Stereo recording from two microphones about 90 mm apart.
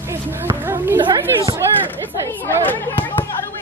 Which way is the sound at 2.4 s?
25° left (ahead or behind).